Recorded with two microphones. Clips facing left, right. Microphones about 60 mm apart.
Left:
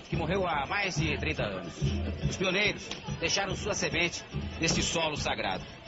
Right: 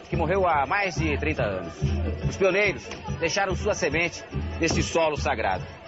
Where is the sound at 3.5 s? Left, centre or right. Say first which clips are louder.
Right 7 dB; right.